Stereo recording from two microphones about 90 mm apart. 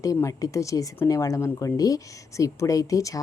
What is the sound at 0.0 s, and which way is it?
Speech, 35° left (ahead or behind).